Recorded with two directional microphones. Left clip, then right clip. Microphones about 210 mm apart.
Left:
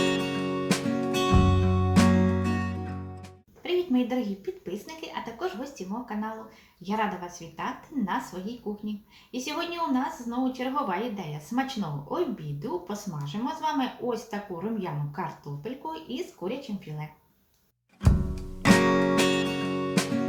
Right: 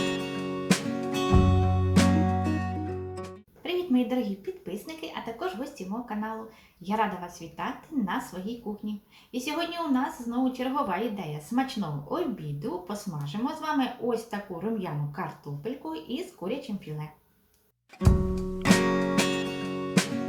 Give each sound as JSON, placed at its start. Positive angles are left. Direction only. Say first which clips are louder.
{"t": 0.0, "sound": "music", "louder": "left 4 dB", "side_deg": 0}
{"t": 6.8, "sound": "speech", "louder": "right 1 dB", "side_deg": 0}
{"t": 18.0, "sound": "music", "louder": "right 4 dB", "side_deg": 0}